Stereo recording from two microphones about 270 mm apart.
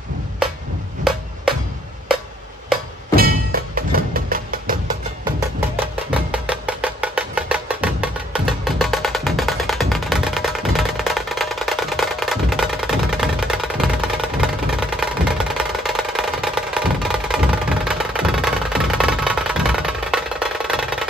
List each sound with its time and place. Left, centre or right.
0.4 s a sound: centre
3.2 s music: right
6.0 s music: centre